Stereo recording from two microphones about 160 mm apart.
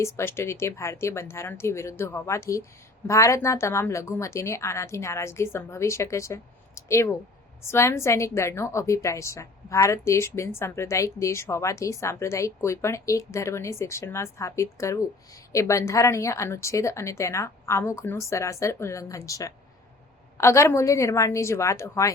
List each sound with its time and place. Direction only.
0.0 s a woman's voice: 15° left (ahead or behind)